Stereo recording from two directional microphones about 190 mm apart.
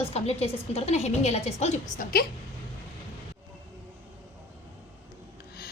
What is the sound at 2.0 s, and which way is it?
Speech, 50° left (ahead or behind).